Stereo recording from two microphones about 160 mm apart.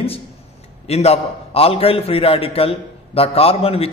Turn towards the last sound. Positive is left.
turn(degrees=35)  # may be behind; listen again after turning